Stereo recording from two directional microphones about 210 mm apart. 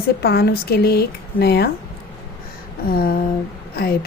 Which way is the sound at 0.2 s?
50° left (ahead or behind).